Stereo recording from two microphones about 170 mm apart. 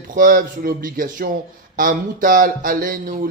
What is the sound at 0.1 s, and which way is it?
A man's voice, 55° right (ahead or behind).